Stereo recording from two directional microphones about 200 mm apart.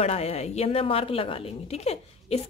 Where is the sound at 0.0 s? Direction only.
30° left (ahead or behind).